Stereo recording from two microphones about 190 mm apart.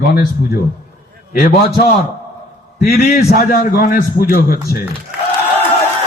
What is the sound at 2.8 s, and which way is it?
A man's voice, 55° left (ahead or behind).